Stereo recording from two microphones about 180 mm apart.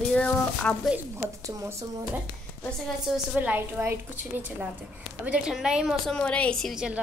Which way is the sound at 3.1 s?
10° right (ahead or behind).